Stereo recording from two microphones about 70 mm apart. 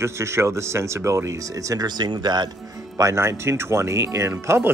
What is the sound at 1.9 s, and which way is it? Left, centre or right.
Speech, right.